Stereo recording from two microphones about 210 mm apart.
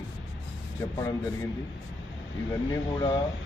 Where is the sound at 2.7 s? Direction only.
20° left (ahead or behind).